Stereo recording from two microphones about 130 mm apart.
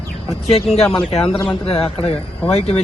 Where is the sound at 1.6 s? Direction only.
50° left (ahead or behind).